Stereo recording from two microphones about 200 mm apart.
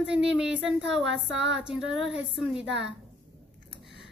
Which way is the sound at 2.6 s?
60° right (ahead or behind).